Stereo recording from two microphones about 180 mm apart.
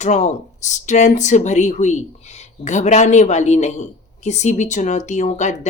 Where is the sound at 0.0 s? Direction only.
40° left (ahead or behind).